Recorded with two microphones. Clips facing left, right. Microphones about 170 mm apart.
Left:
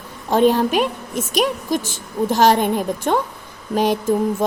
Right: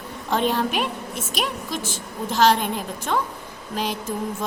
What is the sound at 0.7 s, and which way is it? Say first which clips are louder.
Speech: left 6 dB; 45° left (ahead or behind).